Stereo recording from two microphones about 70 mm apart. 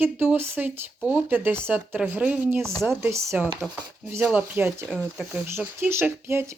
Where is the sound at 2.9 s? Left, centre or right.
Right.